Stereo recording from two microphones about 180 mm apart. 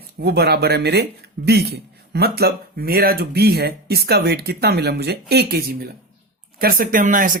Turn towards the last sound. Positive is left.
turn(degrees=-50)  # may be behind; listen again after turning